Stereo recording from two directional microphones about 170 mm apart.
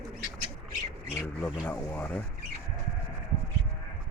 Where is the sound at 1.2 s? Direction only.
15° left (ahead or behind).